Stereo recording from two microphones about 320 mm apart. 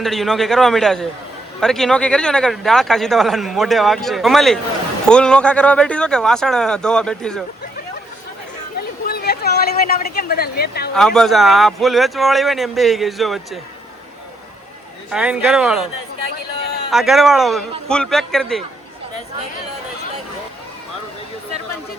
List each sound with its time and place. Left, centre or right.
0.0 s speech: centre
9.0 s a sound: left
10.9 s speech: centre
15.1 s speech: centre
16.9 s speech: centre